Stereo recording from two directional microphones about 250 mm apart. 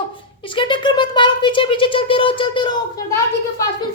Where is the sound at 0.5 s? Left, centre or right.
Centre.